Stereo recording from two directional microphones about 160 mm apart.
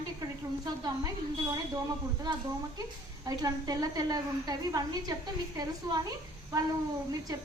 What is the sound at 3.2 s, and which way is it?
A woman's voice, 25° right (ahead or behind).